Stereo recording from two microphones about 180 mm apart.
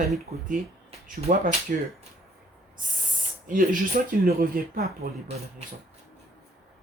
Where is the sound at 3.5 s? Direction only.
50° right (ahead or behind).